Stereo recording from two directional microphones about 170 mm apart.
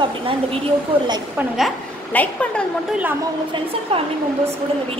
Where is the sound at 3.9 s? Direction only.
35° right (ahead or behind).